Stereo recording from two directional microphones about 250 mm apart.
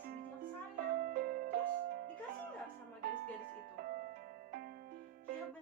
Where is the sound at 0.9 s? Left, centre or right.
Right.